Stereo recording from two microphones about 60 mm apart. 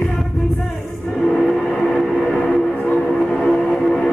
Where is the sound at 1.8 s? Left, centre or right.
Centre; by 3.0 s left.